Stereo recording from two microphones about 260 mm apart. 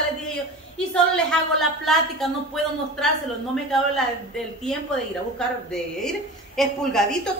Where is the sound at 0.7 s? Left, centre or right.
Centre.